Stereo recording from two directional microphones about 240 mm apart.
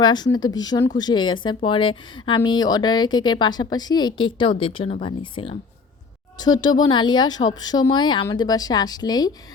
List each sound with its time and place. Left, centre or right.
0.0 s speech: centre